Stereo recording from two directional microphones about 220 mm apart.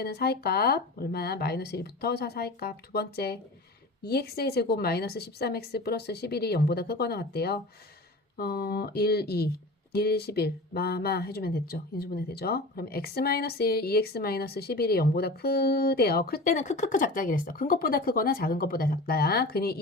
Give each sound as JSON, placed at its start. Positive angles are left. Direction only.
{"t": 0.0, "sound": "speech", "side_deg": 45}